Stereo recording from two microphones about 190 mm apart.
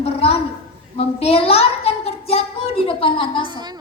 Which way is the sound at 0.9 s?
30° left (ahead or behind).